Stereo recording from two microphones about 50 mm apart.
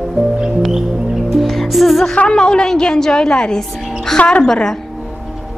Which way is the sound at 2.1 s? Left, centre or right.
Centre.